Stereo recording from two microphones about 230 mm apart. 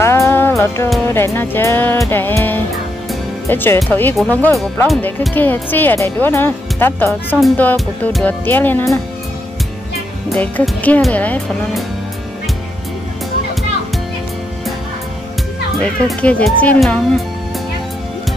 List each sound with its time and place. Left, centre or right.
0.0 s music: centre
1.1 s speech: centre
10.3 s speech: centre
15.8 s speech: centre